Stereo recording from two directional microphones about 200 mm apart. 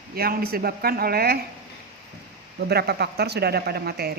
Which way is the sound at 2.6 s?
55° right (ahead or behind).